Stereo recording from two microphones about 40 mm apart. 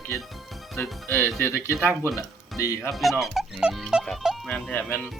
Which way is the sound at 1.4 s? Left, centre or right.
Left.